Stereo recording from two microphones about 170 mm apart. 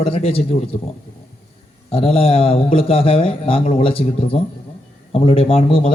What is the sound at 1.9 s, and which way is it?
A man's voice, 35° left (ahead or behind).